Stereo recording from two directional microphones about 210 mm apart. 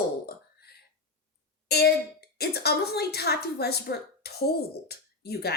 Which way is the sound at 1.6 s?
50° left (ahead or behind).